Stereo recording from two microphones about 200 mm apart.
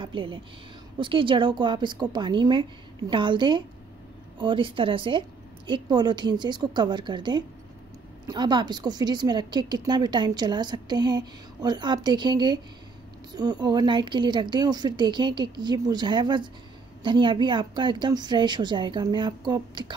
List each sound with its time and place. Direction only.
0.0 s a woman's voice: 25° right (ahead or behind)